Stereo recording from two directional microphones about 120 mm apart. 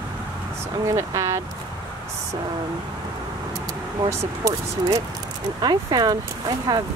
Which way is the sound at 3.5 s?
30° right (ahead or behind).